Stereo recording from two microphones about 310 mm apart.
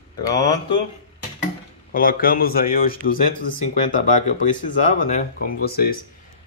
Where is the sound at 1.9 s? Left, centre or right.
Left.